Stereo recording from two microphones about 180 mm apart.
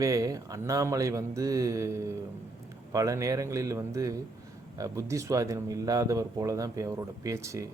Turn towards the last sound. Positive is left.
turn(degrees=-15)  # may be behind; listen again after turning